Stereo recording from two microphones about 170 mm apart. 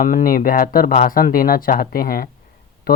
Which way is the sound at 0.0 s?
55° left (ahead or behind).